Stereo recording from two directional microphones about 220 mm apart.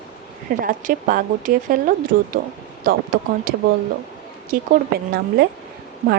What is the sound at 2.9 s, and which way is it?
Speech, 40° right (ahead or behind).